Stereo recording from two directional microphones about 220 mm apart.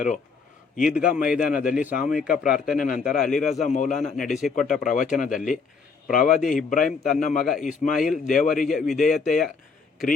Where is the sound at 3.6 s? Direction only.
35° left (ahead or behind).